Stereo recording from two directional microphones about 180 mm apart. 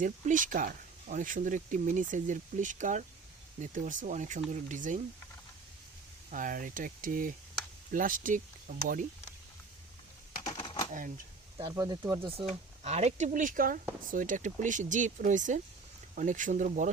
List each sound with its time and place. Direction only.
0.0 s speech: 45° right (ahead or behind)
6.3 s speech: 50° right (ahead or behind)
10.5 s typewriter: 25° left (ahead or behind)
11.5 s speech: 20° right (ahead or behind); by 16.9 s 45° right (ahead or behind)